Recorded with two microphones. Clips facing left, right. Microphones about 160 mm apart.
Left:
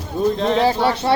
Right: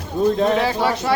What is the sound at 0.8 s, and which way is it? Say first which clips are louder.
Speech: left 2 dB; 30° left (ahead or behind).